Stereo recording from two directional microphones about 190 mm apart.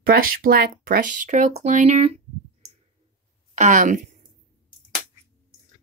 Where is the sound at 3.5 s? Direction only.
40° right (ahead or behind).